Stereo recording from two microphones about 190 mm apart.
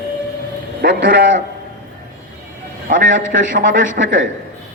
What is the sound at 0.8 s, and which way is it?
Speech, 50° right (ahead or behind).